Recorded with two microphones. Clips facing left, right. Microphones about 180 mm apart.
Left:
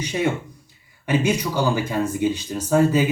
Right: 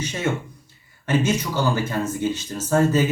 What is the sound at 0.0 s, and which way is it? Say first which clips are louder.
Speech: left 2 dB; 15° left (ahead or behind).